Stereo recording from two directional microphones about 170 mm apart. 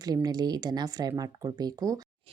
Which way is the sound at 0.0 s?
20° right (ahead or behind).